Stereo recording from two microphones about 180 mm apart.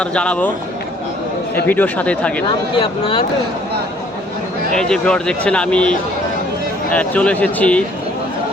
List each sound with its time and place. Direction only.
0.0 s speech: 5° left (ahead or behind)
1.6 s speech: 10° left (ahead or behind)
2.5 s speech: 30° left (ahead or behind)
4.7 s speech: 5° left (ahead or behind)